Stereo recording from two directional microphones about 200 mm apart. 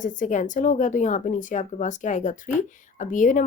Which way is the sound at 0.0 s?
40° left (ahead or behind).